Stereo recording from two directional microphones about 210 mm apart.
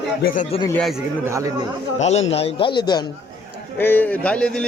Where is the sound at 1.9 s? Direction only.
30° left (ahead or behind).